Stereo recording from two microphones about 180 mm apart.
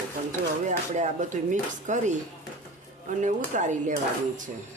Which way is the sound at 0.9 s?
45° right (ahead or behind).